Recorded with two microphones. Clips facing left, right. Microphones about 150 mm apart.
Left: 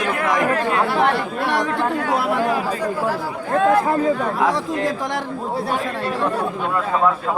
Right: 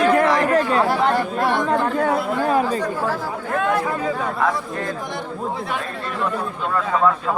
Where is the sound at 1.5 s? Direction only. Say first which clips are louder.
Left 1 dB; 75° left (ahead or behind).